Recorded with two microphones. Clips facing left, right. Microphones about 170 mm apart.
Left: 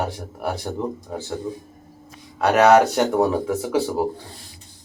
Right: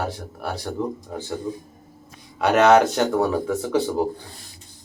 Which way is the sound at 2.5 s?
5° left (ahead or behind).